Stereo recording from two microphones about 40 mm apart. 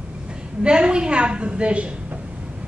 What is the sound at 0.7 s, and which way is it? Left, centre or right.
A woman's voice, right.